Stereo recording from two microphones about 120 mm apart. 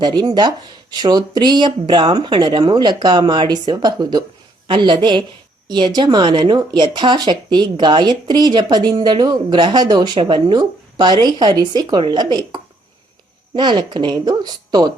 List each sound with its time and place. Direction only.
0.0 s speech: 35° right (ahead or behind)